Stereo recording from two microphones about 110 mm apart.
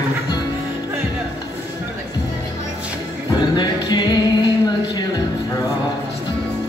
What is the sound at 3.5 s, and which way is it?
Music, 40° left (ahead or behind).